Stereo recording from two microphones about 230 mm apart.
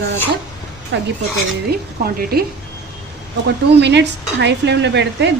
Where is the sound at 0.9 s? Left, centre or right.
Right.